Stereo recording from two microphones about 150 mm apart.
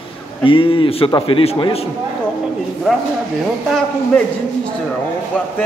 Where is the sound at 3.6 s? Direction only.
5° left (ahead or behind).